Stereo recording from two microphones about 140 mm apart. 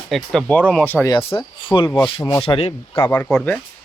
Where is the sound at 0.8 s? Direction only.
15° left (ahead or behind).